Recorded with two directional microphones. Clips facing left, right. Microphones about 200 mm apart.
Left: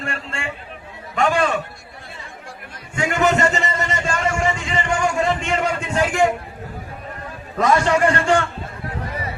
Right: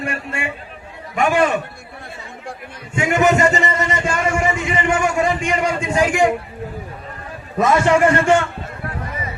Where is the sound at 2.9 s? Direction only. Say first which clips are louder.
Right 3 dB; 20° right (ahead or behind).